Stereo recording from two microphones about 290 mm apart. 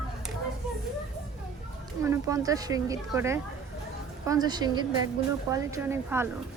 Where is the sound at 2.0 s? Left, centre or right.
Centre.